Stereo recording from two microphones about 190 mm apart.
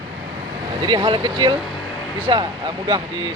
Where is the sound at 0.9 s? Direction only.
25° right (ahead or behind).